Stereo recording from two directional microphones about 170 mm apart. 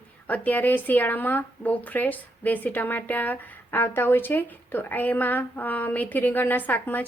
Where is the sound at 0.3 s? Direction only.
10° left (ahead or behind).